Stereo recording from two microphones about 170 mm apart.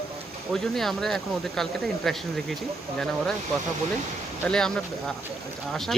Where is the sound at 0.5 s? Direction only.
Centre (ahead or behind).